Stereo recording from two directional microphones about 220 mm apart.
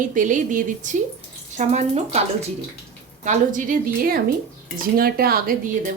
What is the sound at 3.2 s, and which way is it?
A woman's voice, 35° right (ahead or behind).